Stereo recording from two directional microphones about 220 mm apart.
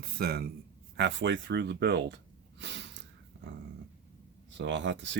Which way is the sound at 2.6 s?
55° right (ahead or behind).